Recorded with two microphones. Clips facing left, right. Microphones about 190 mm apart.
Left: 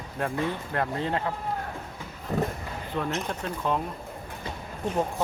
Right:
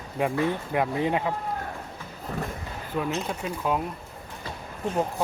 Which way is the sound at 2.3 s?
20° left (ahead or behind).